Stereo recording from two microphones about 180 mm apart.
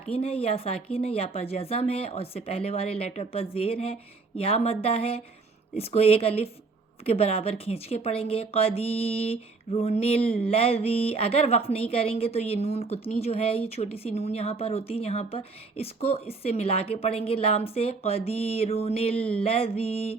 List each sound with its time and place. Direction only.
0.1 s speech: 30° left (ahead or behind)